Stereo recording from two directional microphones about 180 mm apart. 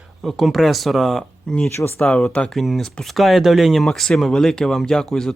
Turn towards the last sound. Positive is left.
turn(degrees=5)  # may be behind; listen again after turning